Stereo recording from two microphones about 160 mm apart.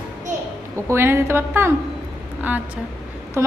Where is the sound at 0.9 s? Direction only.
15° right (ahead or behind).